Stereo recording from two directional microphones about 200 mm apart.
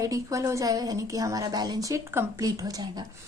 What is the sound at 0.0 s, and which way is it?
A woman's voice, 15° right (ahead or behind).